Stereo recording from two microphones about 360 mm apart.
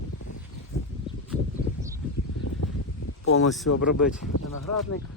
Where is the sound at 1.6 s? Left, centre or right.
Left.